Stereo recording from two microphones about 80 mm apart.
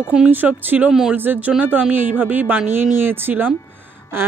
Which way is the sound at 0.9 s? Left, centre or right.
Centre.